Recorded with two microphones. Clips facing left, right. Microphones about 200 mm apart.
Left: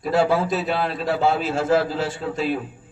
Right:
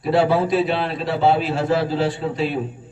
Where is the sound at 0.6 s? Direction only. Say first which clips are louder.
Right 3 dB; 30° right (ahead or behind).